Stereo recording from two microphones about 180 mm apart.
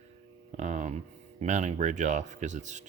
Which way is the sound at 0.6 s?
40° right (ahead or behind).